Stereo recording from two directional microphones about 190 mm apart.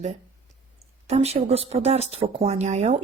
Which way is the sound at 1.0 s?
35° right (ahead or behind).